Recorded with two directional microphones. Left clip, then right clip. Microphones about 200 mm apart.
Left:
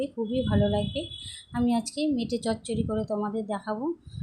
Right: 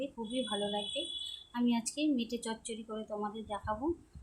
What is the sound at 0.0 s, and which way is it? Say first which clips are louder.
A woman's voice: left 8 dB; 20° left (ahead or behind).